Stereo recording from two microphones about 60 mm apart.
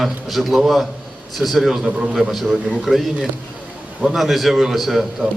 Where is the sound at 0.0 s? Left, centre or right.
Centre.